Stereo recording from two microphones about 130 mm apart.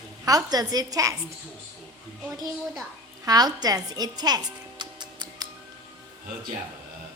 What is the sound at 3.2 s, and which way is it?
Music, 30° right (ahead or behind).